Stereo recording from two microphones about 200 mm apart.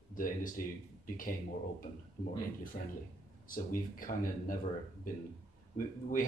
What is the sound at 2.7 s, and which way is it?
Speech, 40° left (ahead or behind).